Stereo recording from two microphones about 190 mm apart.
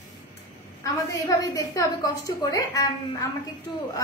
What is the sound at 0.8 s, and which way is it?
A woman's voice, 20° left (ahead or behind).